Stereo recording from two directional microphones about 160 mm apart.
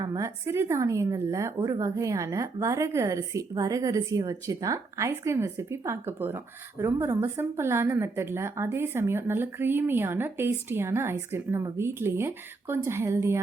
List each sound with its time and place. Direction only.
0.0 s a woman's voice: 20° right (ahead or behind)